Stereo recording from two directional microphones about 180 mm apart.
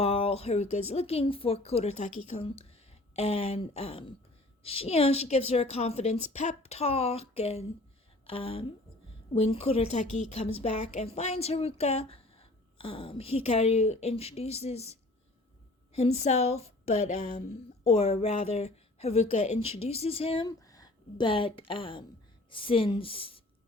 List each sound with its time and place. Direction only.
0.0 s a woman's voice: 35° left (ahead or behind)